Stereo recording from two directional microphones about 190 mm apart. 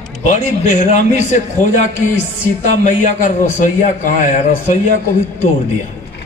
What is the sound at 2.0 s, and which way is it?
Music, 10° left (ahead or behind).